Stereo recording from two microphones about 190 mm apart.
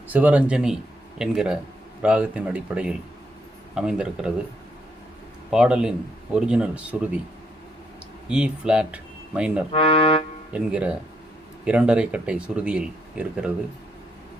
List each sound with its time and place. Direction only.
0.1 s speech: 10° right (ahead or behind)
5.5 s speech: 5° right (ahead or behind)
8.3 s speech: 5° right (ahead or behind)
9.7 s speech: 30° left (ahead or behind)
10.5 s speech: 5° right (ahead or behind)